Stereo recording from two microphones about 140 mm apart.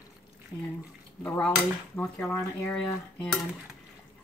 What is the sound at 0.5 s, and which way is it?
Speech, 20° left (ahead or behind).